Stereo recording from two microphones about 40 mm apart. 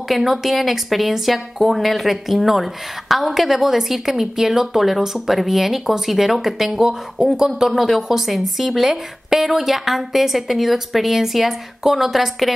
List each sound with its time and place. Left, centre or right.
0.1 s a woman's voice: centre
7.6 s a woman's voice: centre